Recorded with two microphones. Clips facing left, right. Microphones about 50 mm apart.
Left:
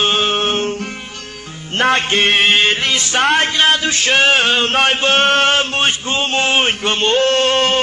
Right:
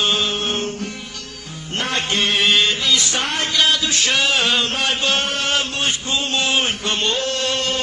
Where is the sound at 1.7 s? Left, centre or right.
Left.